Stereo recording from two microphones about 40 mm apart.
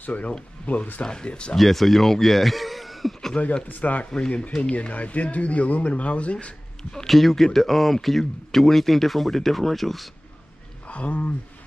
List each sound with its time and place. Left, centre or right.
0.0 s speech: left
1.0 s speech: left
1.6 s speech: centre
3.6 s speech: left
6.3 s speech: centre
7.1 s speech: centre
10.9 s speech: left